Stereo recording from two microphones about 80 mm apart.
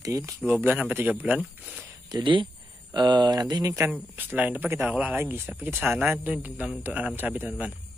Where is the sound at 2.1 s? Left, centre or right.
Right.